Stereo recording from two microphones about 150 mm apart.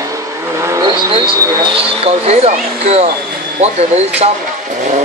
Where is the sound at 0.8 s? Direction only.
35° right (ahead or behind).